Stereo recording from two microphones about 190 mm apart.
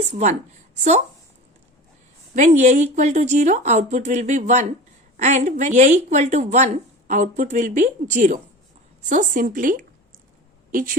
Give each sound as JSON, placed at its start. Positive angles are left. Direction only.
{"t": 0.0, "sound": "a woman's voice", "side_deg": -40}
{"t": 2.3, "sound": "a woman's voice", "side_deg": -40}